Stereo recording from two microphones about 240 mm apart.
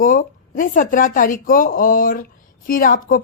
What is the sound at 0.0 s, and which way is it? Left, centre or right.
A woman's voice, left.